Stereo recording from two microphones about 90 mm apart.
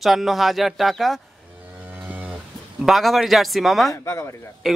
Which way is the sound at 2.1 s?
15° right (ahead or behind).